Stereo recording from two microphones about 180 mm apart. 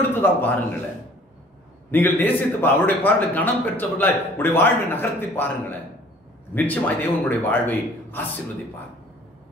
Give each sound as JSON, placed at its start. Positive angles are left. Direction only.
{"t": 0.1, "sound": "a man's voice", "side_deg": 10}
{"t": 1.9, "sound": "a man's voice", "side_deg": 10}